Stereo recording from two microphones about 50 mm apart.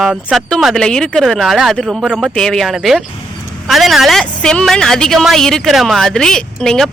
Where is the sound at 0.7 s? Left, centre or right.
Centre.